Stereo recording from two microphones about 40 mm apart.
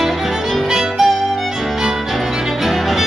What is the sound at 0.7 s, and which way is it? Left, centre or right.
Music, centre.